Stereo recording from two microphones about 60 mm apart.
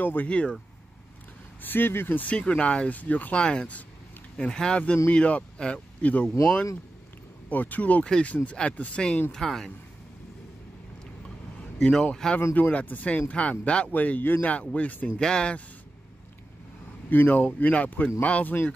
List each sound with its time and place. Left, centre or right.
0.0 s speech: left
0.3 s speech: left
1.6 s speech: left
2.3 s speech: centre
7.4 s speech: left
8.0 s speech: centre
9.3 s speech: centre
11.8 s speech: centre
12.5 s speech: left
15.1 s speech: centre
17.1 s speech: left